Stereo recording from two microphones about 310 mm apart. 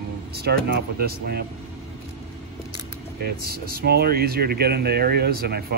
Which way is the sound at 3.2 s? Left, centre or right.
Right.